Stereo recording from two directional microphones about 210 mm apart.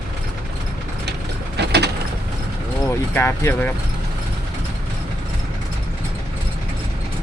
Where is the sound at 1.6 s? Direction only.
50° right (ahead or behind).